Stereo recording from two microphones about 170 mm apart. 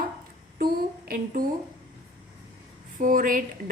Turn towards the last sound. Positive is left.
turn(degrees=-50)  # may be behind; listen again after turning